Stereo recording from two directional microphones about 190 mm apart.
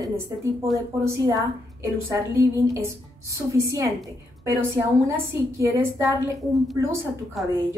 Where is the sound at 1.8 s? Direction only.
15° right (ahead or behind).